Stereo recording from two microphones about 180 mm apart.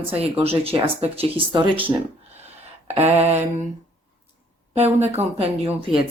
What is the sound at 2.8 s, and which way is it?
Speech, 35° right (ahead or behind).